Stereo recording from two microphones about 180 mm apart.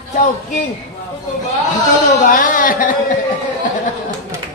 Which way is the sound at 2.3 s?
50° left (ahead or behind).